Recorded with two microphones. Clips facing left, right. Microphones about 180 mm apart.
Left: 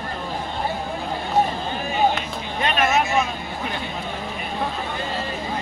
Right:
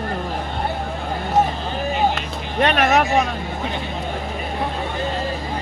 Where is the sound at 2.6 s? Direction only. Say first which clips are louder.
Right 4 dB; 65° right (ahead or behind).